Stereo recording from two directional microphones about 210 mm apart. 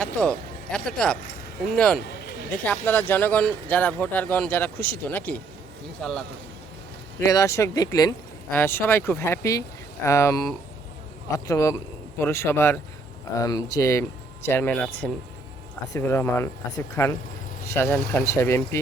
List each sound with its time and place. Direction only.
0.0 s speech: 5° left (ahead or behind)
2.0 s a sound: 50° left (ahead or behind)
2.5 s speech: 10° left (ahead or behind)
7.2 s speech: 15° left (ahead or behind)
15.9 s speech: 10° left (ahead or behind)